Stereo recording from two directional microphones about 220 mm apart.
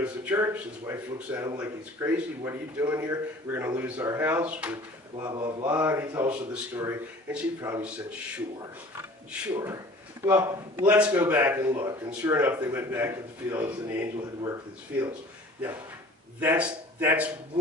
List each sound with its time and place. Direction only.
0.0 s speech: 10° right (ahead or behind)
5.2 s mantra: 20° right (ahead or behind)
5.7 s speech: 10° right (ahead or behind)
16.4 s speech: 5° right (ahead or behind)